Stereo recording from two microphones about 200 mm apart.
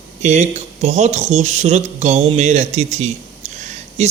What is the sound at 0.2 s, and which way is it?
Speech, 35° right (ahead or behind).